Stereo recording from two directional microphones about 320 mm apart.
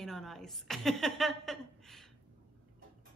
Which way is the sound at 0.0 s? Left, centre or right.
Centre.